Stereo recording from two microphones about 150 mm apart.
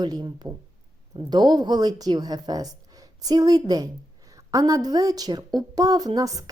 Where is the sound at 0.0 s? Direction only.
30° right (ahead or behind).